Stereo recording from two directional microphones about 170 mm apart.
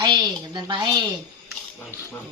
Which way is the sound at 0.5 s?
25° right (ahead or behind).